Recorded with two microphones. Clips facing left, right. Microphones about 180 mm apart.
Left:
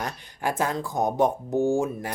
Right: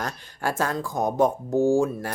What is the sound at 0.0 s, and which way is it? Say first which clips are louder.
Speech: even; 20° left (ahead or behind).